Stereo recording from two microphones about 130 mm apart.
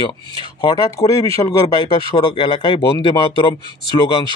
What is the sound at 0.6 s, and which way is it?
Speech, 35° left (ahead or behind).